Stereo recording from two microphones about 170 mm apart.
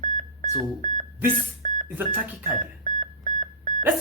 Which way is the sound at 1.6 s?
45° right (ahead or behind).